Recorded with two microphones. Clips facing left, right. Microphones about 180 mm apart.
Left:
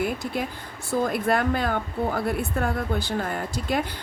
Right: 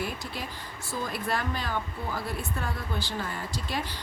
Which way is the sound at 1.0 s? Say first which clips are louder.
Left 7 dB; 55° left (ahead or behind).